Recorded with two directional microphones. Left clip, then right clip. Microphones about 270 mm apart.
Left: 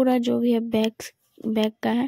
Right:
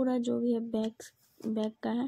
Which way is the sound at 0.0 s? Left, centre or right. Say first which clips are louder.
Left 9 dB; left.